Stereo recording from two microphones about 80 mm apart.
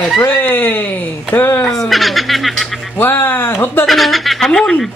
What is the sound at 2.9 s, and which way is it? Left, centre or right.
Speech, left.